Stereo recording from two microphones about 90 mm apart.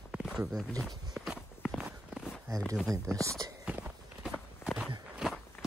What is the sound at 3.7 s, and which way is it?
Walk, 20° right (ahead or behind).